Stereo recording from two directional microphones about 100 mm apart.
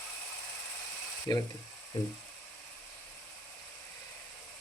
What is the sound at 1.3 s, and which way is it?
Speech, 40° left (ahead or behind).